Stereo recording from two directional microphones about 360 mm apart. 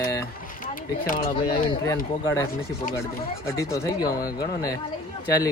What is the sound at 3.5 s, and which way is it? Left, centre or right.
Speech, centre.